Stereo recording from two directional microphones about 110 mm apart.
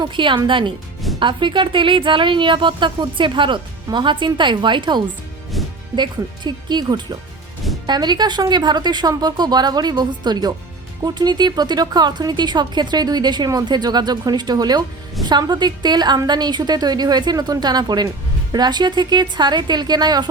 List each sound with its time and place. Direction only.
0.0 s speech: 45° right (ahead or behind)
5.5 s music: centre (ahead or behind)
6.0 s speech: 40° right (ahead or behind)